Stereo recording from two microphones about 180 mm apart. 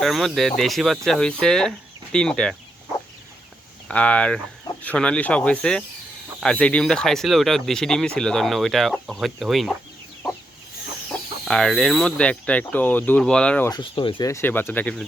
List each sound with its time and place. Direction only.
0.0 s speech: centre (ahead or behind)
3.8 s speech: 5° left (ahead or behind)
11.4 s speech: 5° left (ahead or behind)
13.7 s speech: 25° left (ahead or behind)
14.3 s speech: 15° left (ahead or behind)